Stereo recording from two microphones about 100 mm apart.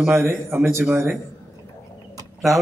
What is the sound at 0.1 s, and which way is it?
A man's voice, 25° right (ahead or behind).